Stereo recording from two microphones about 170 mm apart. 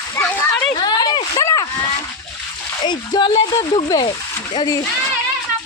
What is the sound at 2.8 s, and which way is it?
Speech, 25° left (ahead or behind).